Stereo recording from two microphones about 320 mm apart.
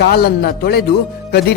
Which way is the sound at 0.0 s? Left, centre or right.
Left.